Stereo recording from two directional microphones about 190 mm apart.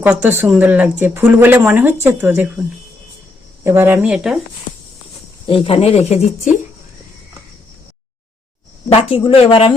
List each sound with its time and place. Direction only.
0.0 s speech: 15° right (ahead or behind)
3.6 s speech: 10° right (ahead or behind)
5.5 s speech: 30° left (ahead or behind)
8.9 s speech: 30° left (ahead or behind)